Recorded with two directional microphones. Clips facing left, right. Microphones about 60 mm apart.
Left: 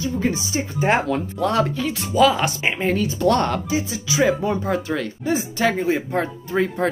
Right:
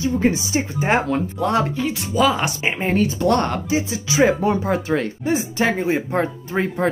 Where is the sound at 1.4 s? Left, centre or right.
Centre.